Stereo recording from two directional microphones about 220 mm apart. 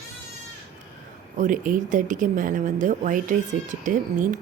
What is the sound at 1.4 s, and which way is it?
A woman's voice, 35° right (ahead or behind).